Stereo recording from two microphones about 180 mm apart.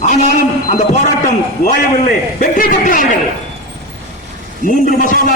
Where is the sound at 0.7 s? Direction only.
40° left (ahead or behind).